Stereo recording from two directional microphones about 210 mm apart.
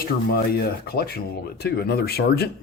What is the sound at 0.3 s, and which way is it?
Speech, 45° left (ahead or behind).